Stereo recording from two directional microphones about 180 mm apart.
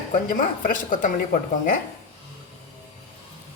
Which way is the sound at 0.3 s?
50° left (ahead or behind).